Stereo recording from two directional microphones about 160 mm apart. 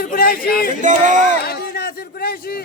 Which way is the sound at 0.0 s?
65° left (ahead or behind).